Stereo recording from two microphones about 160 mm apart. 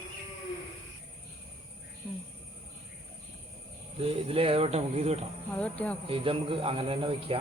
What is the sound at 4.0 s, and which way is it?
Speech, 35° right (ahead or behind).